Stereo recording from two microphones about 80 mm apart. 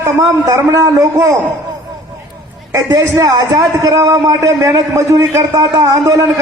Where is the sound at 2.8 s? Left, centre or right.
Right.